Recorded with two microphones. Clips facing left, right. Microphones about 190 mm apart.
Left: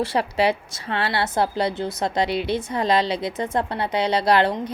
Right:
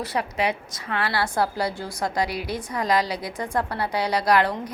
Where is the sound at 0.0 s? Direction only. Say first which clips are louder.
Left 5 dB; 30° left (ahead or behind).